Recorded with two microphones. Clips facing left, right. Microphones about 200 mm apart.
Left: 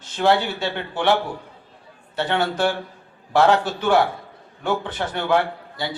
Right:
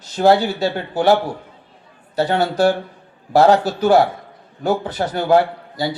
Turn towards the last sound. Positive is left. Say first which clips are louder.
# right 5 dB
turn(degrees=-40)  # may be behind; listen again after turning